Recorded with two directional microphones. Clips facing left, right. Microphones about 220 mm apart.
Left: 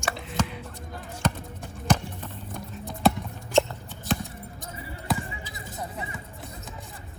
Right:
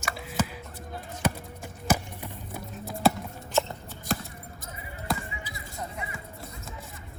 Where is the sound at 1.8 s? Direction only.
10° right (ahead or behind).